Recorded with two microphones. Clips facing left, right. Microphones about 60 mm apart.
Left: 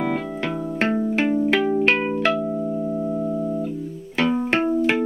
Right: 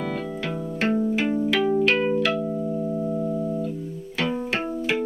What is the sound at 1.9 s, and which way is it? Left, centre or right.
Music, left.